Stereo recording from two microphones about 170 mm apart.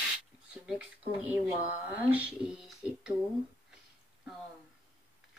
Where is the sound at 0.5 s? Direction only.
5° right (ahead or behind).